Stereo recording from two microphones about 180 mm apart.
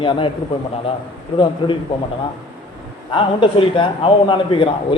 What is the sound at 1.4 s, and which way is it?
Speech, 25° left (ahead or behind).